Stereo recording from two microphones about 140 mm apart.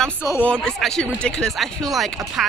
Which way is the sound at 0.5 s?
5° left (ahead or behind).